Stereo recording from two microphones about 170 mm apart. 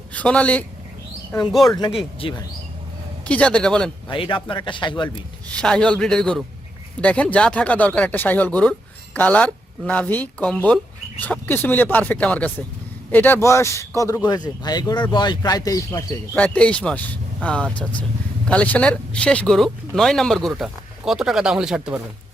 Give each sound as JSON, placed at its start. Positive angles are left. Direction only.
{"t": 0.1, "sound": "speech", "side_deg": 5}
{"t": 1.6, "sound": "speech", "side_deg": 25}
{"t": 3.2, "sound": "speech", "side_deg": 5}
{"t": 4.1, "sound": "speech", "side_deg": 30}
{"t": 5.5, "sound": "speech", "side_deg": 5}